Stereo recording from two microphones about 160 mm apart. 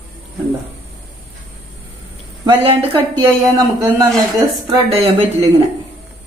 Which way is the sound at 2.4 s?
35° right (ahead or behind).